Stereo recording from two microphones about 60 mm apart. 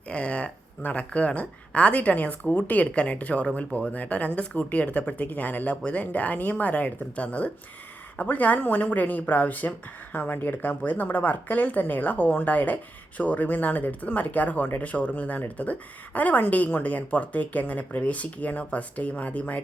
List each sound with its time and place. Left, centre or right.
0.1 s speech: centre